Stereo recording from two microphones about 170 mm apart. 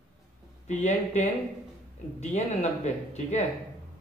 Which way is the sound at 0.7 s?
45° left (ahead or behind).